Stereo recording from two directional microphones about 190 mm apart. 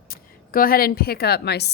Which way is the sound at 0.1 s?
50° left (ahead or behind).